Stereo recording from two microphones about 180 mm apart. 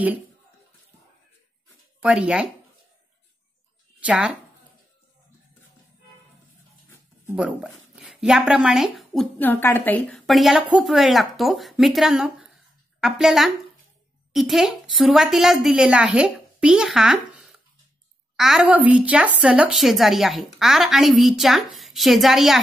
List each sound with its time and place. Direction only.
2.0 s speech: 5° right (ahead or behind)
4.0 s speech: 5° right (ahead or behind)
7.3 s speech: 5° right (ahead or behind)